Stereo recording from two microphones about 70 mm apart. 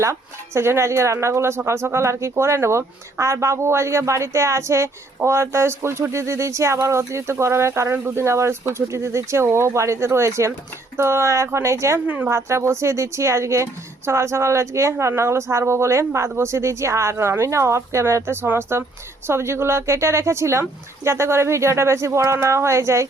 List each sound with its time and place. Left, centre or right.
0.0 s speech: right
12.0 s speech: right
12.3 s speech: right